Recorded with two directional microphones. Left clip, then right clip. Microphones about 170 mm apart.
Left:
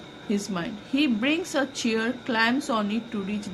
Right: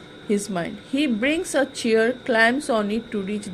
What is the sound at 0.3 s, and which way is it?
A woman's voice, 35° right (ahead or behind).